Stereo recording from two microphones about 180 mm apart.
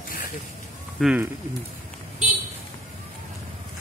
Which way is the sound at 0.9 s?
5° right (ahead or behind).